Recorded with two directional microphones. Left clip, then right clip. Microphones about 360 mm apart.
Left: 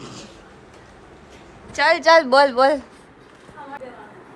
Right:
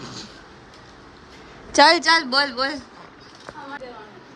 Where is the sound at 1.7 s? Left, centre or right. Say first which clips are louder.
Even; centre.